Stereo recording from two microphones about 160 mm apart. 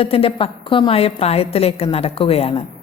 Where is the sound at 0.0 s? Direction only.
35° left (ahead or behind).